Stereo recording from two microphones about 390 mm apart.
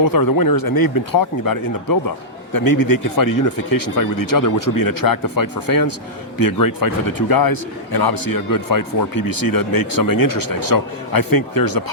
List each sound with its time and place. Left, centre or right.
0.0 s a man's voice: left